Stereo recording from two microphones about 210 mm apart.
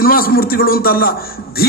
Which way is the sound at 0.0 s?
45° left (ahead or behind).